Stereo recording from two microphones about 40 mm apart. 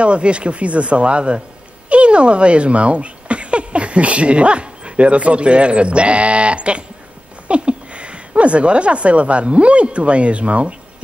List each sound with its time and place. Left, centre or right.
0.0 s speech: right